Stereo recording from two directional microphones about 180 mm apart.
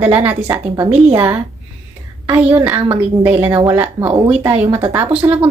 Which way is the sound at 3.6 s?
10° right (ahead or behind).